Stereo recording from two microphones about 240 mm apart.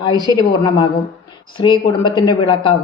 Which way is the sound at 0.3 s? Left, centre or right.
Centre.